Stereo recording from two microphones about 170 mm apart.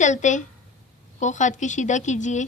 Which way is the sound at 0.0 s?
45° left (ahead or behind).